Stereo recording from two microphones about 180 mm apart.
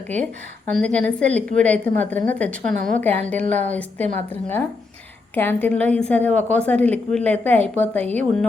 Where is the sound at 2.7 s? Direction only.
50° right (ahead or behind).